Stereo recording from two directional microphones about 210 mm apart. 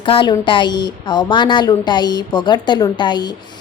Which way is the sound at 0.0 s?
25° left (ahead or behind).